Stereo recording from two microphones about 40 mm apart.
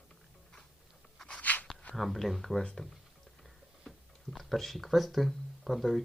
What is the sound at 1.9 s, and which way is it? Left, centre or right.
Speech, centre.